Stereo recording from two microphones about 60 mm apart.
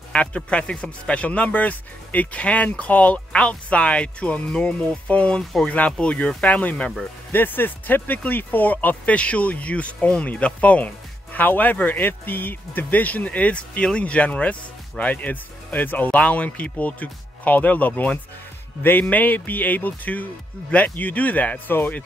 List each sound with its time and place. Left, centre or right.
0.1 s speech: centre